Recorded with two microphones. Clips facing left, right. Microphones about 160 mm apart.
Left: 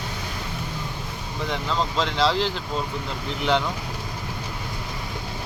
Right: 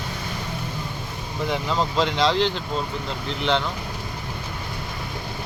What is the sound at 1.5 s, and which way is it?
Speech, 5° right (ahead or behind).